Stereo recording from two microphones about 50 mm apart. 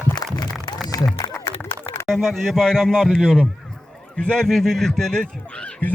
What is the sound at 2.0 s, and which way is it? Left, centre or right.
Speech, centre.